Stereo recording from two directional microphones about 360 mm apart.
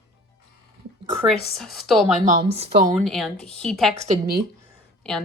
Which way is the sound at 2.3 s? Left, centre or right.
Centre.